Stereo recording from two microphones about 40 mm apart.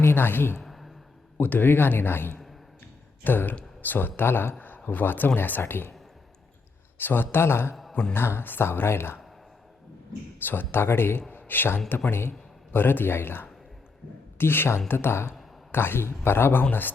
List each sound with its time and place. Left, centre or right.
0.0 s a woman's voice: left
0.6 s a sound: centre
1.4 s speech: left
4.2 s speech: left
4.9 s speech: left
7.0 s speech: left
10.4 s speech: left
11.3 s a sound: left
11.9 s speech: left